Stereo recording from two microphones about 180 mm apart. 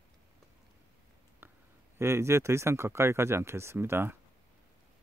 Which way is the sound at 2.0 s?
15° right (ahead or behind).